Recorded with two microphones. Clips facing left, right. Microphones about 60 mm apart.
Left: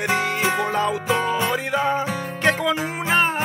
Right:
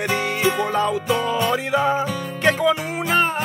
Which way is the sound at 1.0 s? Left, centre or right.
Left.